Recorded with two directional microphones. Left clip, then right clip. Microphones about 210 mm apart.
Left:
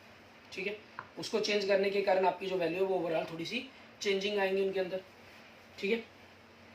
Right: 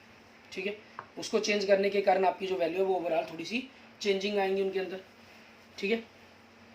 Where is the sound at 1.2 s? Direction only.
55° right (ahead or behind).